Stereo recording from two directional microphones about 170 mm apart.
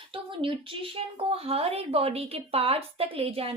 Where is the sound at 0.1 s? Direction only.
30° right (ahead or behind).